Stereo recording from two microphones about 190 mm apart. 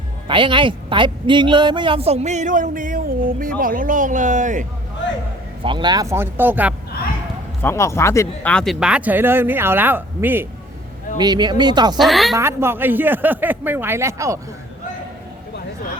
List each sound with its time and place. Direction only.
0.3 s speech: 25° right (ahead or behind); by 4.6 s 40° right (ahead or behind)
5.6 s speech: 25° right (ahead or behind)
7.6 s speech: 15° left (ahead or behind)
8.5 s speech: centre (ahead or behind)
11.2 s speech: 20° right (ahead or behind)
11.9 s a woman's voice: centre (ahead or behind)
12.4 s speech: 15° right (ahead or behind)